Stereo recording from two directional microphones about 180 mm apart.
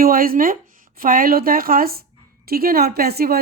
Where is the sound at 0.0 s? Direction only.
55° right (ahead or behind).